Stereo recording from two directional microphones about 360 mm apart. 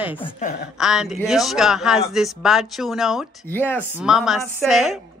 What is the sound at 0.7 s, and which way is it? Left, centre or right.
Speech, centre.